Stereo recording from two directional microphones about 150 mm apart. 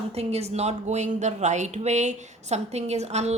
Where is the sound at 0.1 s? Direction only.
45° right (ahead or behind).